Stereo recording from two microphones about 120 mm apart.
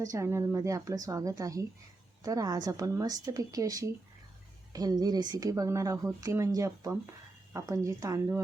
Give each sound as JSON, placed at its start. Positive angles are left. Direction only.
{"t": 0.0, "sound": "speech", "side_deg": -25}